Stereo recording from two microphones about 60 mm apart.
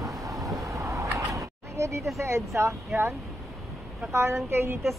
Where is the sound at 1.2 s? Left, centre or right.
Right.